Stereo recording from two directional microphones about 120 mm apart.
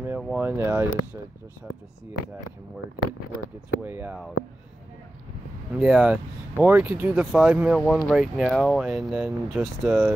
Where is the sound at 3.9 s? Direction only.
15° right (ahead or behind).